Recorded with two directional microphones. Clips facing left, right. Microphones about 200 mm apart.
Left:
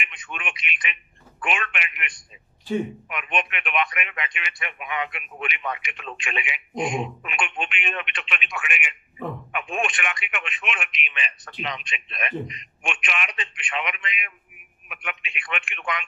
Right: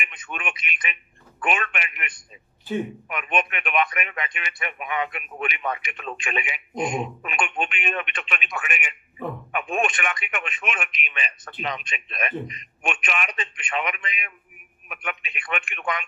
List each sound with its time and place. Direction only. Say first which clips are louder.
0.3 s speech: right 3 dB; 40° right (ahead or behind)
3.1 s speech: right 2 dB; 40° right (ahead or behind)